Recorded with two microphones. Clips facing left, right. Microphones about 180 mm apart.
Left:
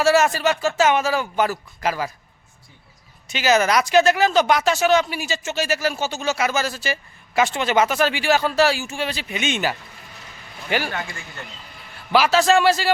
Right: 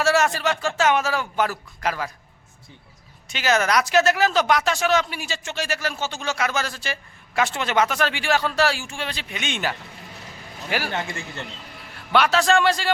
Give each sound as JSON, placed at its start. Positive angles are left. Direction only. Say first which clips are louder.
{"t": 0.0, "sound": "speech", "louder": "left 3 dB", "side_deg": 0}
{"t": 3.2, "sound": "speech", "louder": "left 3 dB", "side_deg": 0}
{"t": 10.9, "sound": "a man's voice", "louder": "right 2 dB", "side_deg": -25}
{"t": 12.1, "sound": "speech", "louder": "left 2 dB", "side_deg": 0}